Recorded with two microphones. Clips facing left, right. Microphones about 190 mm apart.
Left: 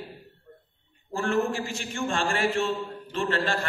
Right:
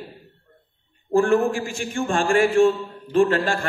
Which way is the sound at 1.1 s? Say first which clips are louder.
Right 8 dB; 50° right (ahead or behind).